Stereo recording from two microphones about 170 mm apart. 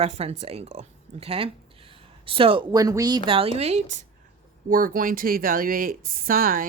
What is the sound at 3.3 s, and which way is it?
Speech, 35° right (ahead or behind).